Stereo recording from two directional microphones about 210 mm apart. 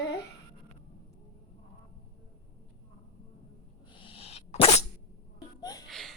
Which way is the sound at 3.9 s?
25° left (ahead or behind).